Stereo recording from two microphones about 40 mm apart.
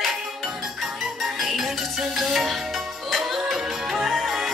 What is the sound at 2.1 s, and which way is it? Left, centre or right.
Music, centre.